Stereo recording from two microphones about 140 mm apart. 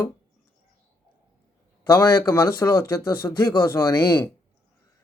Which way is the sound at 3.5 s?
30° left (ahead or behind).